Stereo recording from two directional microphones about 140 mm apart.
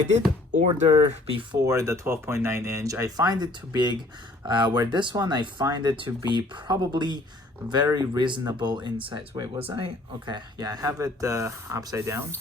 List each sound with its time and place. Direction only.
0.5 s speech: 55° right (ahead or behind)
1.5 s speech: 25° right (ahead or behind)
9.6 s speech: 40° right (ahead or behind); by 12.2 s 20° right (ahead or behind)